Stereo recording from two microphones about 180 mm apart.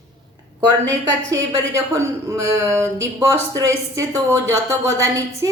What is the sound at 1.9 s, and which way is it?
Speech, 15° right (ahead or behind).